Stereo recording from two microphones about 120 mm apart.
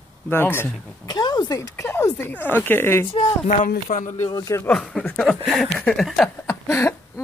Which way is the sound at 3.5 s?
90° left.